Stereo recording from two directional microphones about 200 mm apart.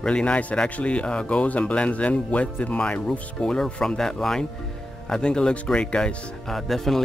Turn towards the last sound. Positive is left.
turn(degrees=0)  # may be behind; listen again after turning